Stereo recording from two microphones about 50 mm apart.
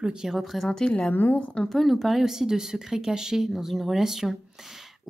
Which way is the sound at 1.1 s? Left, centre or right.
Left.